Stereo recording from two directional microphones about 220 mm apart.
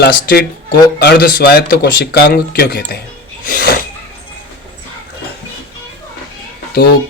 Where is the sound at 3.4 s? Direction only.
40° left (ahead or behind).